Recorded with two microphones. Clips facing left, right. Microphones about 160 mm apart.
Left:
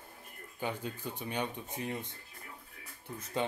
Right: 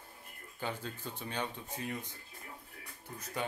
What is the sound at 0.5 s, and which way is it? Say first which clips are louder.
Speech: left 2 dB; 15° left (ahead or behind).